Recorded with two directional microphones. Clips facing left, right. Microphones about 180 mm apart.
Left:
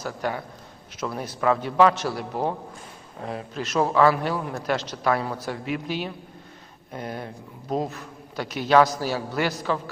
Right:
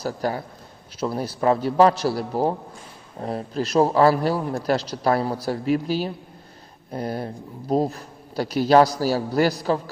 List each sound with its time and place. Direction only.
0.0 s a man's voice: 35° right (ahead or behind)